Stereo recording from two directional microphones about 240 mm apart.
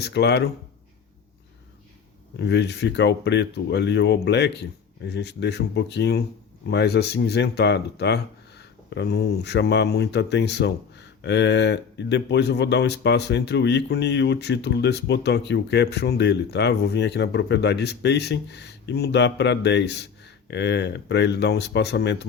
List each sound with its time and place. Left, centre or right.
0.0 s speech: left
2.4 s speech: left